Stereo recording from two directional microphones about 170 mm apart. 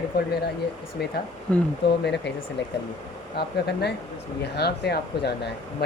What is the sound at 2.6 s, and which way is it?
Speech, 90° left.